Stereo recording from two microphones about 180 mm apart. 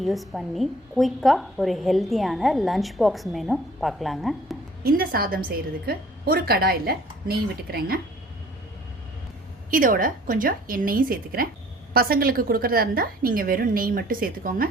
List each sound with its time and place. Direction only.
0.0 s a woman's voice: centre (ahead or behind)
4.8 s a woman's voice: 55° right (ahead or behind)
9.6 s a woman's voice: 50° right (ahead or behind)